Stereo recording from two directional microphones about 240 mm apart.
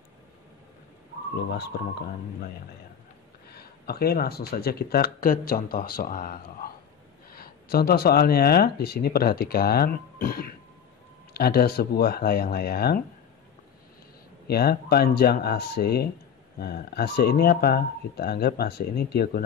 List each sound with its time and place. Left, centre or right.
1.5 s speech: left
3.5 s speech: left
14.5 s speech: left